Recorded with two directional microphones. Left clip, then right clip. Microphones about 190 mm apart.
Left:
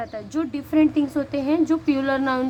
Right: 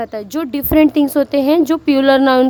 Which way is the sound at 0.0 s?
55° right (ahead or behind).